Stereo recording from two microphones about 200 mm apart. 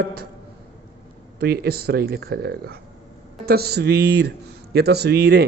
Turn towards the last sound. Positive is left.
turn(degrees=-55)  # may be behind; listen again after turning